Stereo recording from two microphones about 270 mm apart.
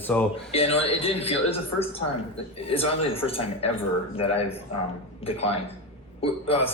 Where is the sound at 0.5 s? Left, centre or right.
Left.